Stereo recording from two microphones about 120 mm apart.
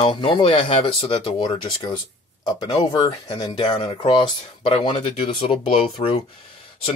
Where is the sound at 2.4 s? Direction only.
40° left (ahead or behind); by 6.2 s 55° left (ahead or behind).